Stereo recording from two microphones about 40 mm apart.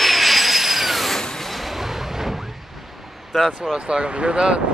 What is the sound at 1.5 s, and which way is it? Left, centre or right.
Artillery fire, centre.